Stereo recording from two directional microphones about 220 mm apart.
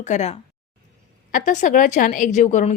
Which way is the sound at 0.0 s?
30° left (ahead or behind).